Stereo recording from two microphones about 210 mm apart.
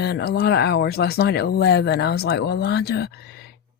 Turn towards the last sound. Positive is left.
turn(degrees=50)  # may be behind; listen again after turning